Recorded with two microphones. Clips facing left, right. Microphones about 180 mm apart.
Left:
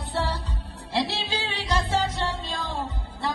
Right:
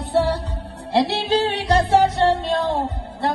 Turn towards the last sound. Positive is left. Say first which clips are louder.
# right 7 dB
turn(degrees=-65)  # may be behind; listen again after turning